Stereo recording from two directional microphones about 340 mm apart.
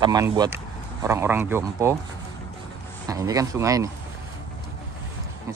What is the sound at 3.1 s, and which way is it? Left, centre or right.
Speech, centre.